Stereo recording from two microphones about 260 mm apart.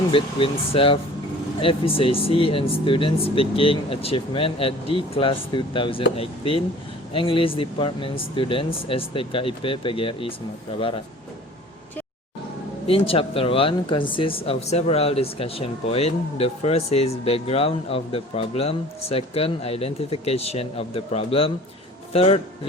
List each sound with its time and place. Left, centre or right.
0.1 s speech: left
12.9 s speech: left